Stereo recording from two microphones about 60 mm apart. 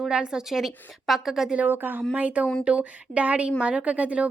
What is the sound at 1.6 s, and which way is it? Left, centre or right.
A woman's voice, right.